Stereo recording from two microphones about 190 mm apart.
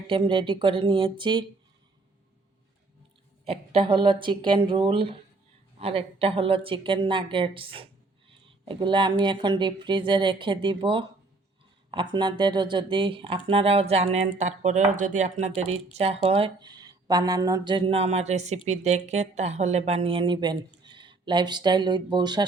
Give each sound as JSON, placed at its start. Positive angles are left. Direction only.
{"t": 0.1, "sound": "speech", "side_deg": -25}
{"t": 3.4, "sound": "speech", "side_deg": -30}